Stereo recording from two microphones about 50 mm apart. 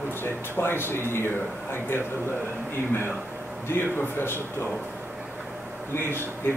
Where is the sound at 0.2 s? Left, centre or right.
Left.